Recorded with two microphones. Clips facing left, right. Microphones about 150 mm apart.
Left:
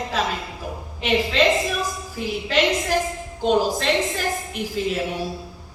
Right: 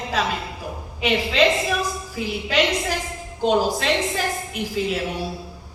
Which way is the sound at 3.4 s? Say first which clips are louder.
Even; 45° left (ahead or behind).